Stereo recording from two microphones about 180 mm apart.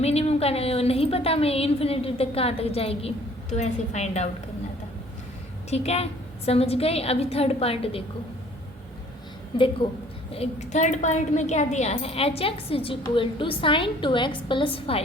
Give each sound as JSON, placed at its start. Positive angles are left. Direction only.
{"t": 0.0, "sound": "a woman's voice", "side_deg": 35}
{"t": 5.7, "sound": "a woman's voice", "side_deg": 35}
{"t": 9.5, "sound": "a woman's voice", "side_deg": 25}
{"t": 10.3, "sound": "a woman's voice", "side_deg": 35}